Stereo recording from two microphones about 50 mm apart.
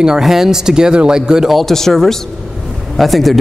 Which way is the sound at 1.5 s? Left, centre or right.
Centre.